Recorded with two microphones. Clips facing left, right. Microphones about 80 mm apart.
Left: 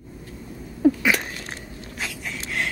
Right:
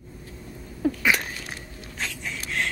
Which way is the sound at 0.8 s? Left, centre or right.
Centre.